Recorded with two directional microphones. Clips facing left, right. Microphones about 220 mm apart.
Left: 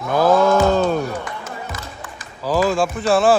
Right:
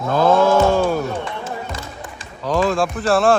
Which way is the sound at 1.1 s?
30° right (ahead or behind).